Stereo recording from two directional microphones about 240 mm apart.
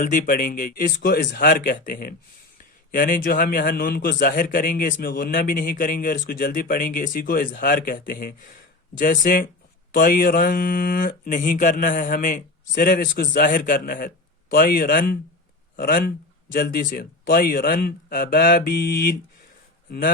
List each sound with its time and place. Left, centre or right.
0.0 s a man's voice: left